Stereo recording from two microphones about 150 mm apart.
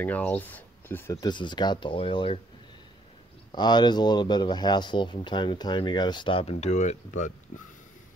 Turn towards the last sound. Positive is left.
turn(degrees=55)  # may be behind; listen again after turning